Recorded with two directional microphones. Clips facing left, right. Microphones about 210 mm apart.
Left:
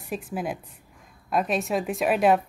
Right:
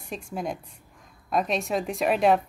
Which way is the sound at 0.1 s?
5° left (ahead or behind).